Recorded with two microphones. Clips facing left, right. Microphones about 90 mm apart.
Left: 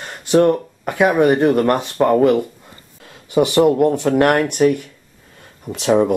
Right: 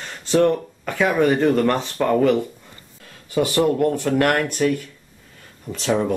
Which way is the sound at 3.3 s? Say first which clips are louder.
Left 5 dB; 20° left (ahead or behind).